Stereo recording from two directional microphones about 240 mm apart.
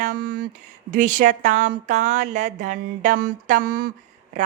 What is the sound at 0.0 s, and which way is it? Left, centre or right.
Speech, right.